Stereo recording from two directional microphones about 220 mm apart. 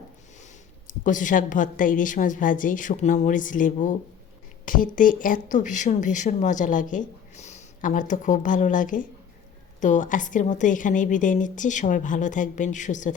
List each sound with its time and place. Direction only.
0.9 s a woman's voice: 35° left (ahead or behind)